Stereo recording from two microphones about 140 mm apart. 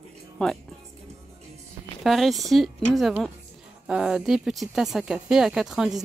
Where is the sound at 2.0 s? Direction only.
Centre (ahead or behind).